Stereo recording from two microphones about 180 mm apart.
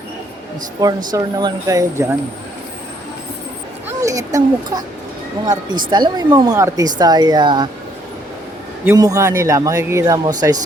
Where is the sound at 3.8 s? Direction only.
20° right (ahead or behind).